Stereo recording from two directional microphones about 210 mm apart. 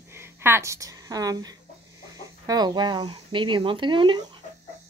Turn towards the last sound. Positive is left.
turn(degrees=-20)  # may be behind; listen again after turning